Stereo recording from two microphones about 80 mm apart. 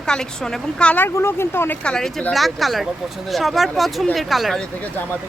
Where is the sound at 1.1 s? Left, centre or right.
Left.